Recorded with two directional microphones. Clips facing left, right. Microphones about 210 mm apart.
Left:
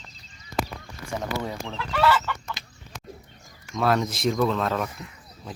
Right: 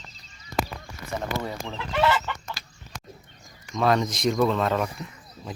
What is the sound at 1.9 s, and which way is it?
Chicken, 20° right (ahead or behind).